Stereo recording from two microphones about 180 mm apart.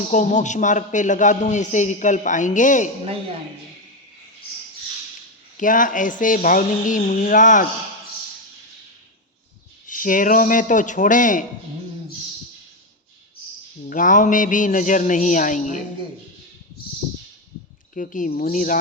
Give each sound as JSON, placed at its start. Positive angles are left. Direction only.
{"t": 0.1, "sound": "a man's voice", "side_deg": 45}
{"t": 5.5, "sound": "a man's voice", "side_deg": 45}
{"t": 9.8, "sound": "a man's voice", "side_deg": 45}
{"t": 13.8, "sound": "a man's voice", "side_deg": 45}
{"t": 17.9, "sound": "a man's voice", "side_deg": 45}